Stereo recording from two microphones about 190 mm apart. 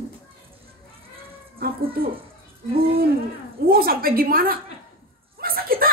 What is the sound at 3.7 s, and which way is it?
Speech, 50° right (ahead or behind).